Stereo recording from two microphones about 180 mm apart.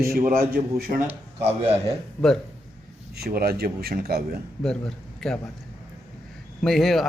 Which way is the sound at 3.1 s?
60° right (ahead or behind).